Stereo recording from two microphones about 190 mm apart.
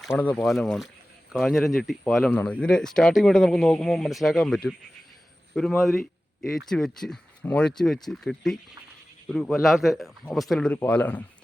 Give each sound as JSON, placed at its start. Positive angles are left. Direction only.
{"t": 0.1, "sound": "speech", "side_deg": 10}